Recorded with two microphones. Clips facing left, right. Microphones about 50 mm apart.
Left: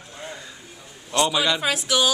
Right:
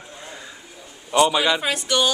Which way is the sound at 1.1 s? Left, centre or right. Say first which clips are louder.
Right 4 dB; centre.